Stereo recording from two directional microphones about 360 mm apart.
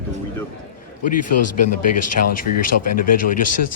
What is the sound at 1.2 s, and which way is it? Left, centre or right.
Speech, left.